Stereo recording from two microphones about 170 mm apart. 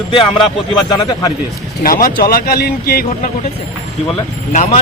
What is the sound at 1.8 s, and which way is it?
Speech, 55° left (ahead or behind).